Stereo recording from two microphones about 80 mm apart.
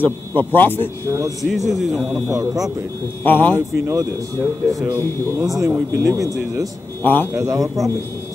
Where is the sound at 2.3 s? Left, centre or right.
Right.